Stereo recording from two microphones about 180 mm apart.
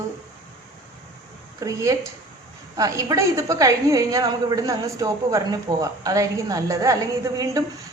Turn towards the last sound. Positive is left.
turn(degrees=-20)  # may be behind; listen again after turning